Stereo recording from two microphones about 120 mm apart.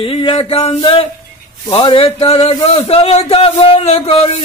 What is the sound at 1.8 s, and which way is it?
Speech, 50° left (ahead or behind).